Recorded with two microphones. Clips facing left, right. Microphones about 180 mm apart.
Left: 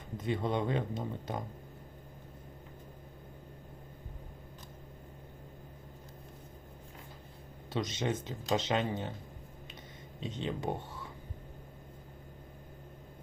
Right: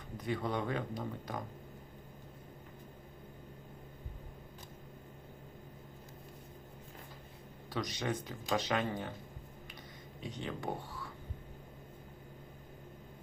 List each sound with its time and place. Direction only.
0.2 s speech: 25° left (ahead or behind)
7.7 s speech: 25° left (ahead or behind)
10.2 s speech: 20° left (ahead or behind)